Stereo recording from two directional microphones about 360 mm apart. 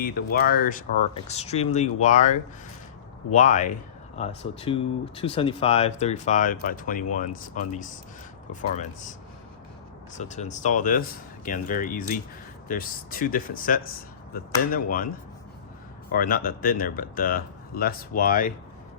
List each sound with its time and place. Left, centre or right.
0.3 s speech: left
10.2 s speech: centre
16.1 s speech: left